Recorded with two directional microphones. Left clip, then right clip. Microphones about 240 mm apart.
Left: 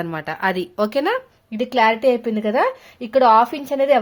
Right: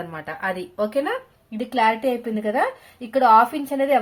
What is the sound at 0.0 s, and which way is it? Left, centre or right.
A woman's voice, left.